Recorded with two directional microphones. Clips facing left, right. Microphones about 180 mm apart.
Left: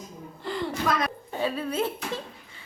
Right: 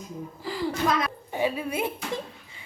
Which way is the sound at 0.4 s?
5° right (ahead or behind).